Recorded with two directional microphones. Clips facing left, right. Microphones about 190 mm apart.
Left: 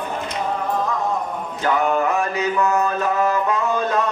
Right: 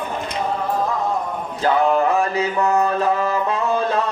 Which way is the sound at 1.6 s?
30° right (ahead or behind).